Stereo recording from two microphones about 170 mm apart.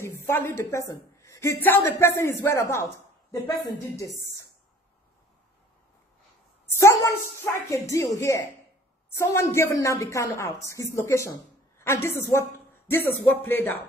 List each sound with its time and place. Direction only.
0.0 s a woman's voice: 15° left (ahead or behind)
6.6 s a woman's voice: 15° left (ahead or behind)